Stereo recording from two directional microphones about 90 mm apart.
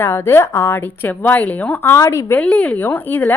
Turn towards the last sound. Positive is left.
turn(degrees=20)  # may be behind; listen again after turning